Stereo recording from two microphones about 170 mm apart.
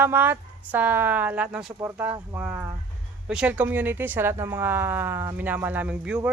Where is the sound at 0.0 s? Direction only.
10° right (ahead or behind).